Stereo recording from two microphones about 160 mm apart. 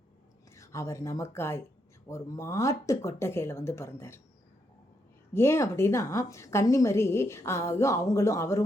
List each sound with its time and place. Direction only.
0.5 s a woman's voice: 15° left (ahead or behind)
5.3 s a woman's voice: 15° left (ahead or behind)